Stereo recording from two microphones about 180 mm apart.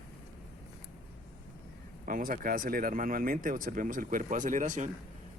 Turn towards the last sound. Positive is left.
turn(degrees=-45)  # may be behind; listen again after turning